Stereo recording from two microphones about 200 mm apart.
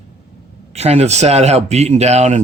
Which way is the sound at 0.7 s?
30° right (ahead or behind).